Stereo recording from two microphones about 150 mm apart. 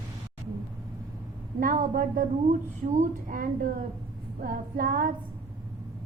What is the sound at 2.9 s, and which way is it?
A woman's voice, 65° right (ahead or behind).